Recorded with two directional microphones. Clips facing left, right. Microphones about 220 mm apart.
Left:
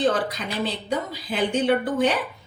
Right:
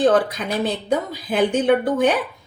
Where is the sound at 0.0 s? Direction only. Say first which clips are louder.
Right 6 dB; 50° right (ahead or behind).